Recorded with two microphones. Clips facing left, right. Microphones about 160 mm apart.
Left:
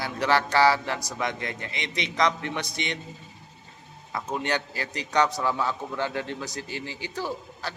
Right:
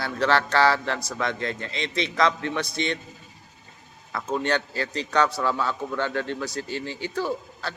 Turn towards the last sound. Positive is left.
turn(degrees=15)  # may be behind; listen again after turning